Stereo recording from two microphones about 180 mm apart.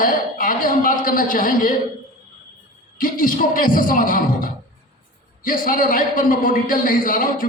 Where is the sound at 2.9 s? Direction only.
50° left (ahead or behind).